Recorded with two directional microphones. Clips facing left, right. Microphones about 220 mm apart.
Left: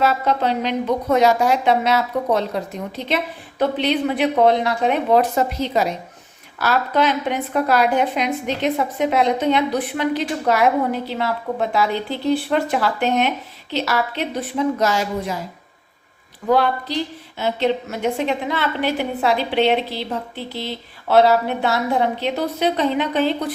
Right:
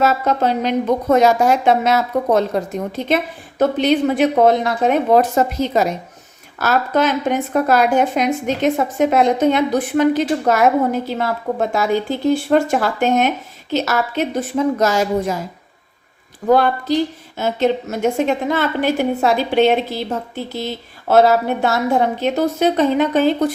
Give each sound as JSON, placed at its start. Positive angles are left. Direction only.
{"t": 0.0, "sound": "a woman's voice", "side_deg": -45}
{"t": 16.5, "sound": "a woman's voice", "side_deg": -45}